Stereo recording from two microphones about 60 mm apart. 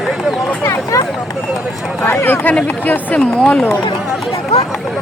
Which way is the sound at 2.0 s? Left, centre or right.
Left.